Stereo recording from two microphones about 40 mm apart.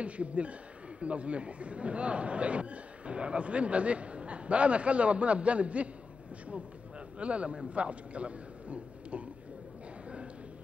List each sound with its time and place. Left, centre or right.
0.0 s speech: right
7.2 s a man's voice: right